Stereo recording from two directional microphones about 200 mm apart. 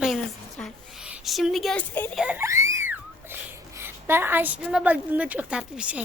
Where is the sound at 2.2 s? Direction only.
10° right (ahead or behind).